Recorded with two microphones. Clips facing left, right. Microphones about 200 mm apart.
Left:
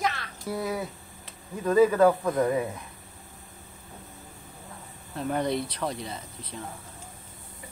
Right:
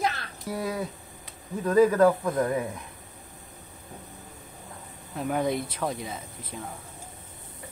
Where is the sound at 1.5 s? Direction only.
15° right (ahead or behind).